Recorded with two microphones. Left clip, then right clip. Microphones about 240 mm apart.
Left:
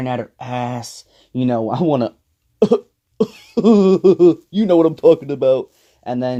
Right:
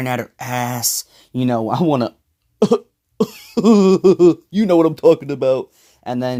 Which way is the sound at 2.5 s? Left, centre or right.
Right.